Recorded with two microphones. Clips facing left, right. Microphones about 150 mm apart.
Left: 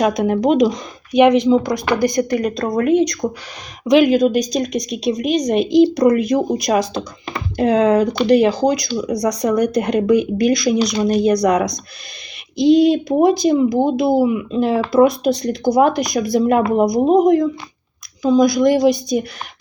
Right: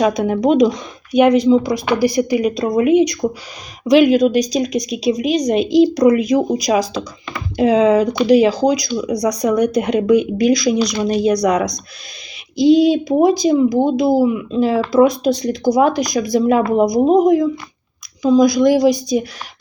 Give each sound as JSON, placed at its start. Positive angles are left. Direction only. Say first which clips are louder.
{"t": 0.0, "sound": "speech", "louder": "right 1 dB", "side_deg": 0}